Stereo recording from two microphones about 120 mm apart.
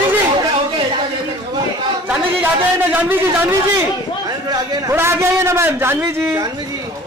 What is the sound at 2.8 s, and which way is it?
Speech, 15° right (ahead or behind).